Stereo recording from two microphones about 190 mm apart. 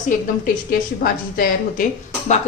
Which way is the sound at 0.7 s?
50° left (ahead or behind).